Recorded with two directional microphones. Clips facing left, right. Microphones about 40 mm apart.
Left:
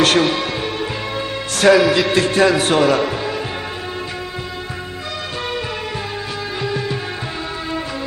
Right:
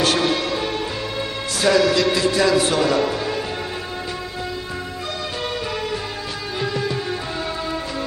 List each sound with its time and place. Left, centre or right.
0.0 s speech: left
1.7 s music: centre
2.1 s speech: left